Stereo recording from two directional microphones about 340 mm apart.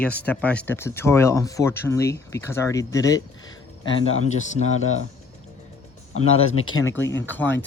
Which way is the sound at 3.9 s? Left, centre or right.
Centre.